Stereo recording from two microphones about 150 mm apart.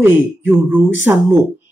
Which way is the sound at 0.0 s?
15° right (ahead or behind).